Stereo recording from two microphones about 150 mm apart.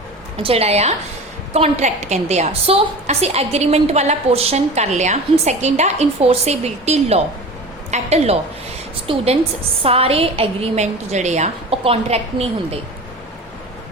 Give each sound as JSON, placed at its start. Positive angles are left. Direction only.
{"t": 0.4, "sound": "a woman's voice", "side_deg": -45}